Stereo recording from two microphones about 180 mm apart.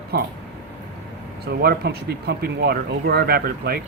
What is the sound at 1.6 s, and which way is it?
Speech, 60° right (ahead or behind).